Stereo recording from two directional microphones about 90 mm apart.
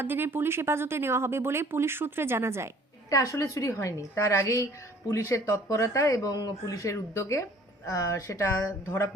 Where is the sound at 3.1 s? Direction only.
40° left (ahead or behind).